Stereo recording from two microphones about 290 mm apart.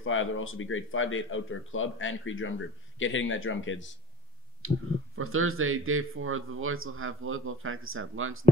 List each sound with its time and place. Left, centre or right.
0.0 s speech: left
4.6 s speech: right